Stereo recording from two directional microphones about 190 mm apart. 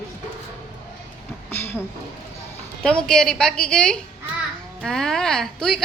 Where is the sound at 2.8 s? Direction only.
5° left (ahead or behind).